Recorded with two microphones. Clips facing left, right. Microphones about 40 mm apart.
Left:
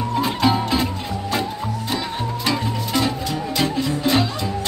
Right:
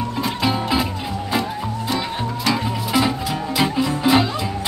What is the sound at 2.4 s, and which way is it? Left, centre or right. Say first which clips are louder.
Music: right 2 dB; centre.